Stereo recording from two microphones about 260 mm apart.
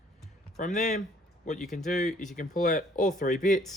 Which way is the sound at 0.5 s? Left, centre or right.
Left.